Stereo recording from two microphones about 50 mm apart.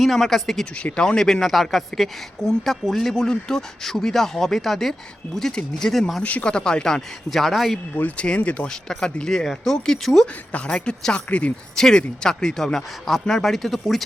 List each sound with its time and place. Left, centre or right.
0.0 s speech: centre
6.2 s speech: left
6.5 s speech: centre
8.1 s speech: centre
8.6 s speech: centre
10.5 s speech: left
11.8 s speech: centre